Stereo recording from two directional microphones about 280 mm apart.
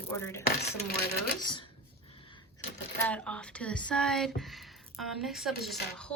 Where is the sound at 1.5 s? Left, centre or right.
Centre.